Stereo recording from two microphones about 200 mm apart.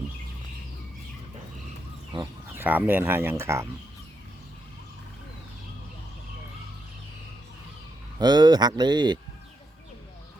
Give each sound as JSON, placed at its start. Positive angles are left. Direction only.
{"t": 2.6, "sound": "speech", "side_deg": -10}
{"t": 8.2, "sound": "speech", "side_deg": -20}